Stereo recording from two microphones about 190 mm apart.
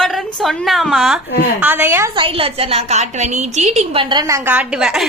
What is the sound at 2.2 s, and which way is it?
A woman's voice, 30° right (ahead or behind).